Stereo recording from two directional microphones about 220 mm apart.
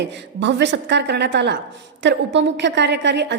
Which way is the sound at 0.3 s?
55° right (ahead or behind).